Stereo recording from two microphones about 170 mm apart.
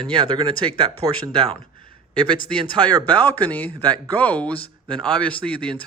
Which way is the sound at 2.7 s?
25° right (ahead or behind).